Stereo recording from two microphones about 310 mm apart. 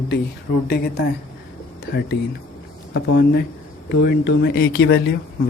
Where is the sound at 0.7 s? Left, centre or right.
Left.